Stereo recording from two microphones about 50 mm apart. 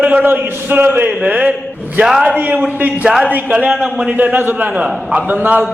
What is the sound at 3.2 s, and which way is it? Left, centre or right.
A man's voice, right.